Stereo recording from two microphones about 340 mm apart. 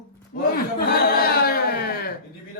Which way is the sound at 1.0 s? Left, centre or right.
Left.